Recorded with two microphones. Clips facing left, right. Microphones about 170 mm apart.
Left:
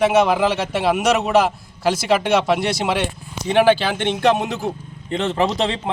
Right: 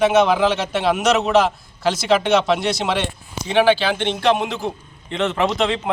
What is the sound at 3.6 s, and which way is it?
Speech, 45° left (ahead or behind).